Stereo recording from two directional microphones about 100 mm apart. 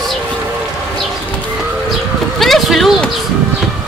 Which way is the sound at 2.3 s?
Centre (ahead or behind).